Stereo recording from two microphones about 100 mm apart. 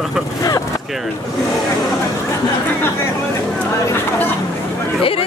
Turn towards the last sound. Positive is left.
turn(degrees=65)  # may be behind; listen again after turning